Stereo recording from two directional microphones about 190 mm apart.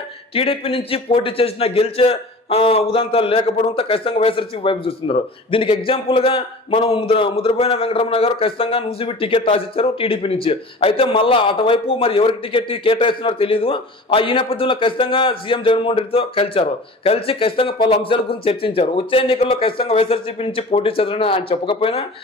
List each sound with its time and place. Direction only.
0.3 s a man's voice: 30° left (ahead or behind)